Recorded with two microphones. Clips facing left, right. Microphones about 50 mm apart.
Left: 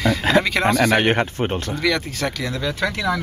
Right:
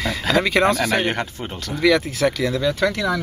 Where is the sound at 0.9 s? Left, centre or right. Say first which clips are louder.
Left 3 dB; left.